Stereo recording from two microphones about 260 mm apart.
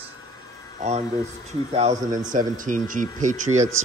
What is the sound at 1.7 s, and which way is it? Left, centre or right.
Speech, right.